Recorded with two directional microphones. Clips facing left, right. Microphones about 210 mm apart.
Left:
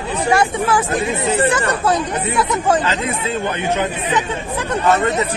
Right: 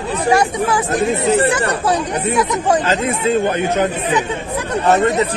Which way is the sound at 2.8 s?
45° right (ahead or behind).